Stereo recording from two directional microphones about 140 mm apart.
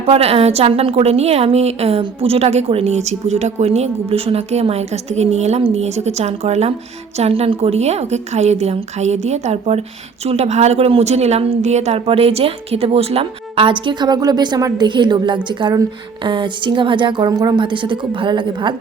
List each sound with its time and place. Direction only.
0.0 s a woman's voice: 45° right (ahead or behind)